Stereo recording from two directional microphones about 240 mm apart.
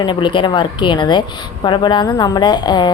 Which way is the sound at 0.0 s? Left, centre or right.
Centre.